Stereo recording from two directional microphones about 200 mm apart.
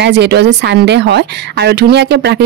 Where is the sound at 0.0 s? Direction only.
55° right (ahead or behind).